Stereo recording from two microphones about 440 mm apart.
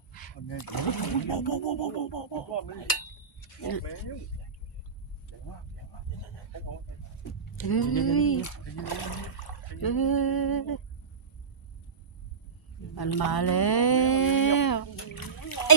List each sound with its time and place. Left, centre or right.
0.4 s speech: left
1.5 s a sound: left
3.6 s speech: left
7.6 s speech: left
13.0 s speech: left